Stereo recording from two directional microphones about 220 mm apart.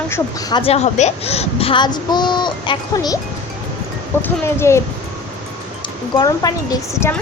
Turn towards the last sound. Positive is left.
turn(degrees=15)  # may be behind; listen again after turning